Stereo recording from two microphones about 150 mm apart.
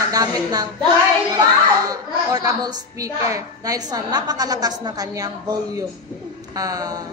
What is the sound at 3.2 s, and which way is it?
A woman's voice, 20° right (ahead or behind).